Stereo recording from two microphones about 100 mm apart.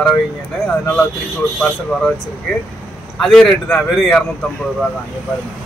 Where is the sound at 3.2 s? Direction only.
5° left (ahead or behind).